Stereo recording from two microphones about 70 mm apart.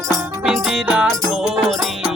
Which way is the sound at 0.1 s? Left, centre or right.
Centre.